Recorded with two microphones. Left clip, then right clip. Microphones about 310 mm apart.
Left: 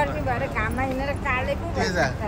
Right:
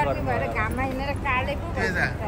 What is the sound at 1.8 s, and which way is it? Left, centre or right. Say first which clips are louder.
Vehicle: left 1 dB; centre.